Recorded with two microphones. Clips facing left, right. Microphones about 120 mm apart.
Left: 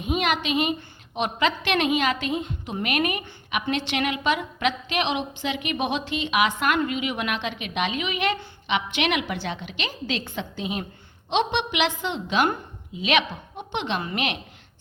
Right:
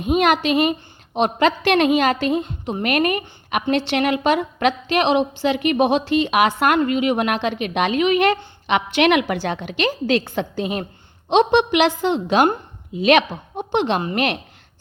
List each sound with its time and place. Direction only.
0.0 s a woman's voice: 45° right (ahead or behind)